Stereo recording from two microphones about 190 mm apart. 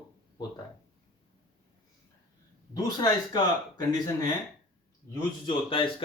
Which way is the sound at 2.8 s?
20° left (ahead or behind).